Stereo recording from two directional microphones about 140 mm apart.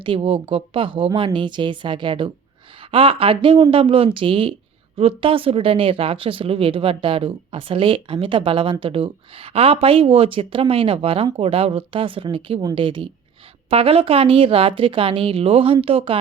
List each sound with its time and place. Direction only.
0.0 s speech: 40° right (ahead or behind)